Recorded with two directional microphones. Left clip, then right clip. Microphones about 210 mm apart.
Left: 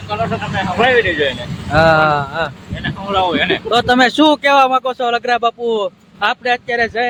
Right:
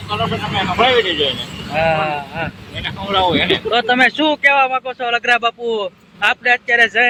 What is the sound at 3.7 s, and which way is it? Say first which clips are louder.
Speech: left 3 dB; 30° left (ahead or behind).